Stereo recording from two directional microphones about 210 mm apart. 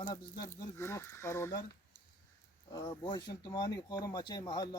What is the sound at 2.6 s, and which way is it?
Speech, 15° left (ahead or behind).